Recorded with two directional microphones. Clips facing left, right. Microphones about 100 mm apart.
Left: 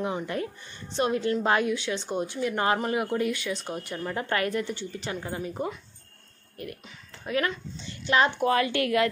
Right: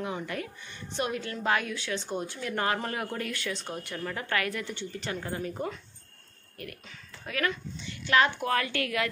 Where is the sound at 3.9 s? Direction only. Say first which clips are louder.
Left 3 dB; 25° left (ahead or behind).